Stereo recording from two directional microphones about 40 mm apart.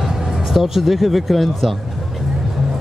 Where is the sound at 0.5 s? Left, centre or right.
Centre.